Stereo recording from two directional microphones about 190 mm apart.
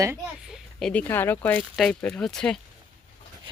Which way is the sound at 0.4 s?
Centre (ahead or behind).